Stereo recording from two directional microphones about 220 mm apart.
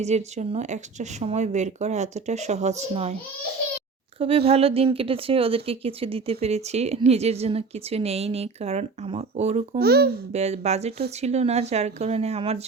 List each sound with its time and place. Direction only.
0.0 s speech: 30° right (ahead or behind)
4.2 s speech: 25° right (ahead or behind)
9.8 s a child's voice: 45° right (ahead or behind)
10.3 s speech: 30° right (ahead or behind)